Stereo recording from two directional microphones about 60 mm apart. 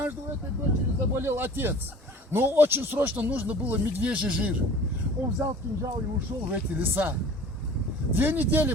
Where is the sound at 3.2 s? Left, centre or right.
Right.